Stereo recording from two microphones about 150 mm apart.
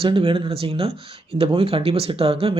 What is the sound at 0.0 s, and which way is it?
Speech, 35° right (ahead or behind).